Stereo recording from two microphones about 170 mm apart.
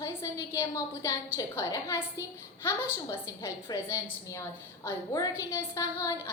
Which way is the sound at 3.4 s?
20° left (ahead or behind).